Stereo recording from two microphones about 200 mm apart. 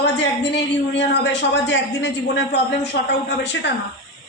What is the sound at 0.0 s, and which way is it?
A man's voice, 65° left (ahead or behind).